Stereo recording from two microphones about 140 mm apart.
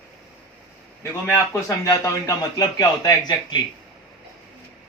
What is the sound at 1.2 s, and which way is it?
Speech, 20° left (ahead or behind).